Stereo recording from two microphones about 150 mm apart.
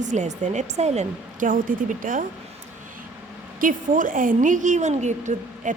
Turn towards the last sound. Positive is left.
turn(degrees=-55)  # may be behind; listen again after turning